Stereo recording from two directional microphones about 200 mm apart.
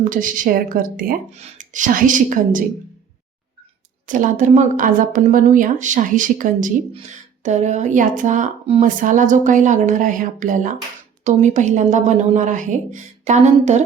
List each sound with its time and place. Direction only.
0.0 s speech: 40° right (ahead or behind)
4.0 s a woman's voice: 40° right (ahead or behind)